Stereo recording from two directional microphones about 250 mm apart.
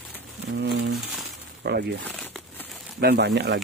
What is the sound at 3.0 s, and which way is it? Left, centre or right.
Speech, right.